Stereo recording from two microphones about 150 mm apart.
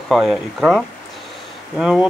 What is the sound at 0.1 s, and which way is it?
Speech, centre (ahead or behind).